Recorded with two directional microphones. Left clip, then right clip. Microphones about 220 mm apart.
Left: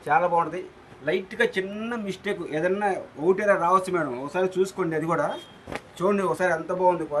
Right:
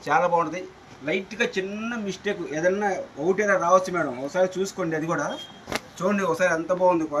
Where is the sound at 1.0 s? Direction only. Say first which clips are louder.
Left 1 dB; 55° left (ahead or behind).